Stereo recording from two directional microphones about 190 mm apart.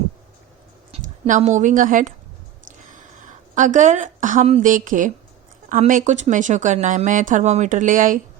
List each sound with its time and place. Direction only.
0.9 s a woman's voice: 35° right (ahead or behind)